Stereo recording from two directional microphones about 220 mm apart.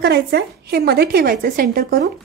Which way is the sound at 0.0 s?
45° right (ahead or behind).